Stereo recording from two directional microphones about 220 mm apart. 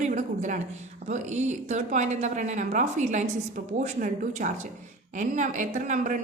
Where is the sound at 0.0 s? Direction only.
35° right (ahead or behind).